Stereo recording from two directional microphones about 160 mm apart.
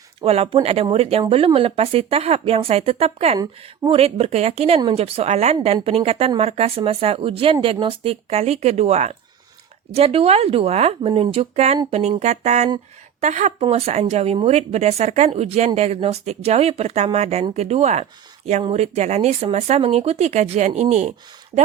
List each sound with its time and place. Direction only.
0.2 s speech: 35° right (ahead or behind)
3.3 s speech: 25° right (ahead or behind)
3.9 s speech: 40° right (ahead or behind)